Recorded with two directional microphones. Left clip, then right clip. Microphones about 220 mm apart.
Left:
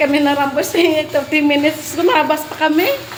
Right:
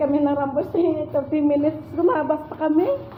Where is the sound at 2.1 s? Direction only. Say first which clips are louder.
Left 7 dB; 20° left (ahead or behind).